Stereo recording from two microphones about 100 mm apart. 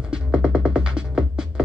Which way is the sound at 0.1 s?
10° right (ahead or behind).